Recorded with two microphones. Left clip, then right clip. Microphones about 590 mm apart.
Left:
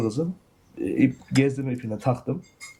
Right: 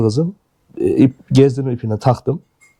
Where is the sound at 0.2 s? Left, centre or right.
Right.